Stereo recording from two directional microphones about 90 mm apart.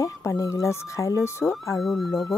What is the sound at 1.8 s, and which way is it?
Speech, centre (ahead or behind).